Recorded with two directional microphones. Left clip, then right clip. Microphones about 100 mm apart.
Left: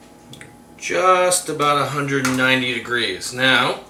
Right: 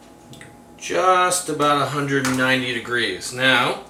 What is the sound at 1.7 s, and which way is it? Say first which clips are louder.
Speech: left 1 dB; 20° left (ahead or behind).